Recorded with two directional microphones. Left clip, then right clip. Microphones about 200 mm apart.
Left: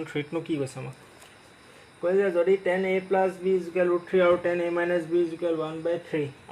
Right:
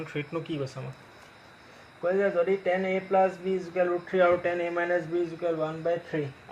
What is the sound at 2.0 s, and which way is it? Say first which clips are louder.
Speech: left 2 dB; 45° left (ahead or behind).